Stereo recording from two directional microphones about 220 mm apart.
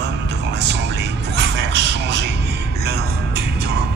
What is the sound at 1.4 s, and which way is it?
Music, 50° right (ahead or behind).